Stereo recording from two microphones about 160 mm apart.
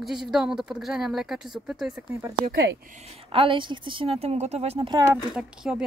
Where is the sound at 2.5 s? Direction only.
90° right.